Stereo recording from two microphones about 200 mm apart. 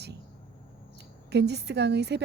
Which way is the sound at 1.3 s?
55° right (ahead or behind).